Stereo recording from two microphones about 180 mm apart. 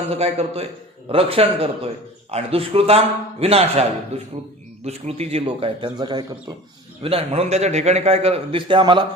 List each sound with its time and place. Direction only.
0.1 s a man's voice: 35° right (ahead or behind)